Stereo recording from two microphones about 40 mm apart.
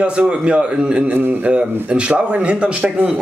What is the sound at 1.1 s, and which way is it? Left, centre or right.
Speech, right.